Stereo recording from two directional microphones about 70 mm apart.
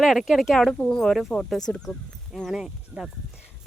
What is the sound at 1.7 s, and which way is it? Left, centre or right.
Speech, left.